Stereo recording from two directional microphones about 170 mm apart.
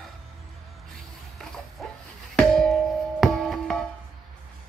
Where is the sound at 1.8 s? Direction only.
Centre (ahead or behind).